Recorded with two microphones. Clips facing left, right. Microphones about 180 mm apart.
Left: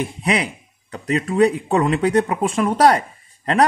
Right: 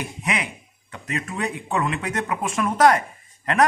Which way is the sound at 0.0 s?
35° left (ahead or behind).